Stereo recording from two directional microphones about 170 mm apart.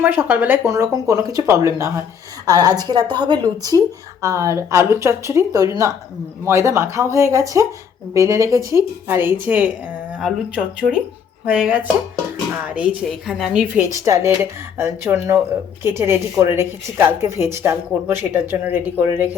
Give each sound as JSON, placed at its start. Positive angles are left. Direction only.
{"t": 0.0, "sound": "a woman's voice", "side_deg": -10}
{"t": 13.8, "sound": "speech", "side_deg": -15}